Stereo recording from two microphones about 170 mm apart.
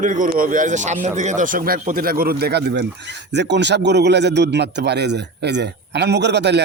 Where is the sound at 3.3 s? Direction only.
90° right.